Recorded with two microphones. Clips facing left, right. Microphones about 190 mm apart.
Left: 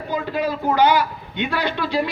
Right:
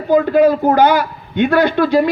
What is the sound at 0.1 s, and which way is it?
Speech, 50° right (ahead or behind).